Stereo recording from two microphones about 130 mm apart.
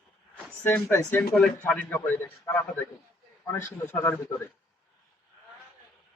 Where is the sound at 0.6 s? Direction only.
15° left (ahead or behind).